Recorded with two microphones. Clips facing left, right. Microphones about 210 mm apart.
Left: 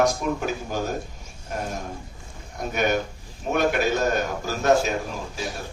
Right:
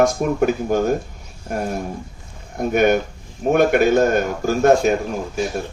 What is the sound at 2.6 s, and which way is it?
Speech, 50° right (ahead or behind).